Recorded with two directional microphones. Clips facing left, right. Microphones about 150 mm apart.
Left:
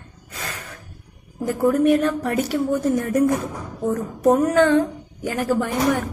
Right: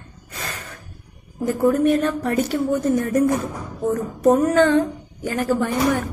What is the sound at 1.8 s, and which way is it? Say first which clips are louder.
A woman's voice: left 1 dB; 10° left (ahead or behind).